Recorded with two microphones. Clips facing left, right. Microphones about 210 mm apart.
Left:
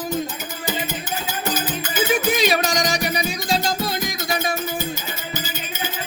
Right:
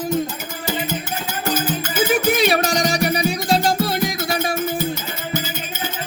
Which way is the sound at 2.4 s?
60° right (ahead or behind).